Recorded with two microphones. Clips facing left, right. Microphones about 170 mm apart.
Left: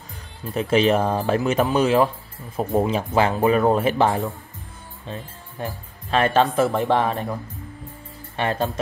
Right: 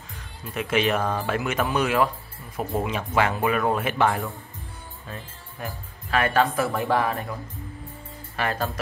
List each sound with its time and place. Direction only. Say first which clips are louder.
0.6 s speech: left 5 dB; 35° left (ahead or behind)
8.4 s speech: left 4 dB; 25° left (ahead or behind)